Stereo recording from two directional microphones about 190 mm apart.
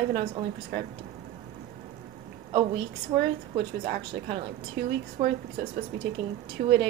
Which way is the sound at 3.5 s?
55° right (ahead or behind).